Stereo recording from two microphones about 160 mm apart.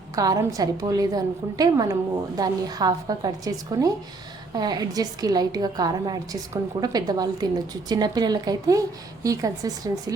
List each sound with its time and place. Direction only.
0.2 s a woman's voice: 20° right (ahead or behind)